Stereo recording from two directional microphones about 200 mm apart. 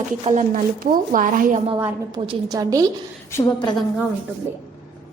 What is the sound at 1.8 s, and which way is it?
A woman's voice, 25° right (ahead or behind).